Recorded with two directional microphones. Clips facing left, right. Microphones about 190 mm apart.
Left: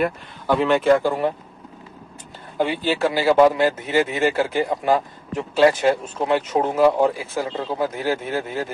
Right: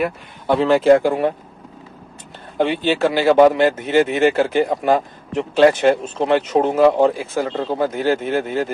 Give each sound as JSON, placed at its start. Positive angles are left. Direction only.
{"t": 0.5, "sound": "speech", "side_deg": -30}
{"t": 2.5, "sound": "speech", "side_deg": -25}